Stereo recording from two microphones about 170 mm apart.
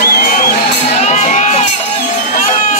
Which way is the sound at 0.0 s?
65° left (ahead or behind).